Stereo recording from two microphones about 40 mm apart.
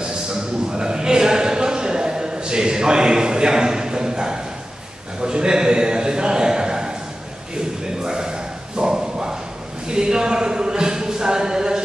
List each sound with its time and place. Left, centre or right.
0.0 s a sound: centre
5.2 s a man's voice: centre
7.5 s bow-wow: centre
9.8 s speech: centre